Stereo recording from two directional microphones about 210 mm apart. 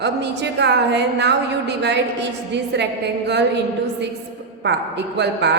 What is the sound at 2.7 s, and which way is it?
Speech, 55° right (ahead or behind).